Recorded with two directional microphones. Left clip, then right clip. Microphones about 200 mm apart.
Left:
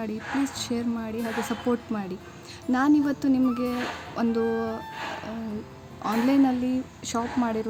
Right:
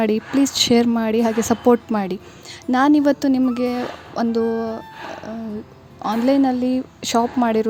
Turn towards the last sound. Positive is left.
turn(degrees=-35)  # may be behind; listen again after turning